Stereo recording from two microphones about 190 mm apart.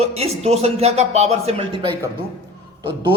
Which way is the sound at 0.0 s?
35° right (ahead or behind).